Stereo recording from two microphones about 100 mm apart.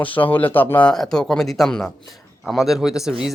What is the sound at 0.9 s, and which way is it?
Speech, 5° left (ahead or behind).